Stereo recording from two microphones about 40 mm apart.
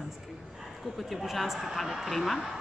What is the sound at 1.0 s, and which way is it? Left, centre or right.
Speech, centre.